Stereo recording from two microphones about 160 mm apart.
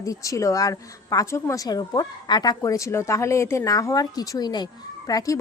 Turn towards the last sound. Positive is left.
turn(degrees=20)  # may be behind; listen again after turning